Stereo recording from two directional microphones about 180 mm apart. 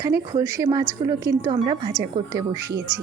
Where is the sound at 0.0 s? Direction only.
20° right (ahead or behind).